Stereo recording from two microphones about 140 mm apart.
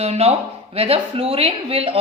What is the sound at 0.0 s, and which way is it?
Speech, 50° right (ahead or behind).